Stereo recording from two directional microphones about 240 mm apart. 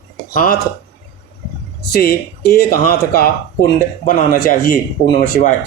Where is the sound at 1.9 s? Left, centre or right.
Left.